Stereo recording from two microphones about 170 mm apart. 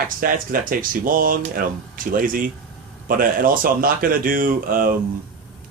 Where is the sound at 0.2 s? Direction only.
55° right (ahead or behind).